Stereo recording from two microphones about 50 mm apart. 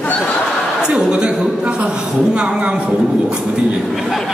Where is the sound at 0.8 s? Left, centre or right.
Right.